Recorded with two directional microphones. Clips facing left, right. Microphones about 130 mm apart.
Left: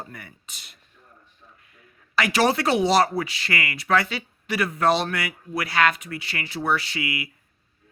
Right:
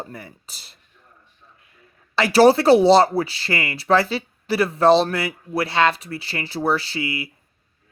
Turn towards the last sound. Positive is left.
turn(degrees=-30)  # may be behind; listen again after turning